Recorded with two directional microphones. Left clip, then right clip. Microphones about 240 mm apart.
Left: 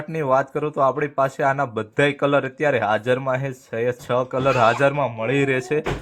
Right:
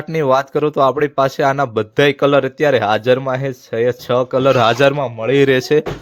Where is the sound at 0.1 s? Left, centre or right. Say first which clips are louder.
Right 5 dB; right.